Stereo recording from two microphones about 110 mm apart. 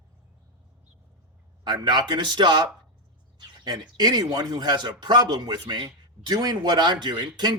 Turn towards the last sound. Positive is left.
turn(degrees=-40)  # may be behind; listen again after turning